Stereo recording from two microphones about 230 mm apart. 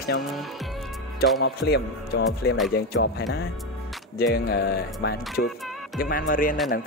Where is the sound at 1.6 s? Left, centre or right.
Left.